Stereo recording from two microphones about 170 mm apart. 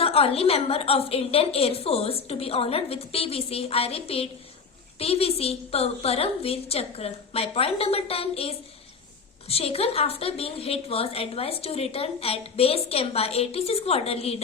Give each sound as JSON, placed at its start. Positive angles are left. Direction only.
{"t": 0.0, "sound": "a woman's voice", "side_deg": 35}